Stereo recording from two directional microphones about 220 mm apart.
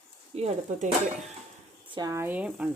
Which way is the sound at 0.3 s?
30° right (ahead or behind).